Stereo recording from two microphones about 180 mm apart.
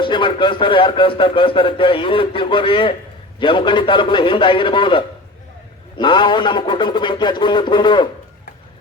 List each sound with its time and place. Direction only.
0.0 s speech: 25° left (ahead or behind)